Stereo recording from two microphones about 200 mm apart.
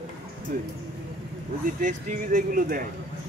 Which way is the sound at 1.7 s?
40° right (ahead or behind).